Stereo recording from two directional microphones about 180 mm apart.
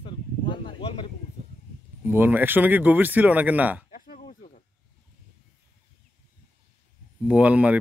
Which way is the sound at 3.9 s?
50° left (ahead or behind).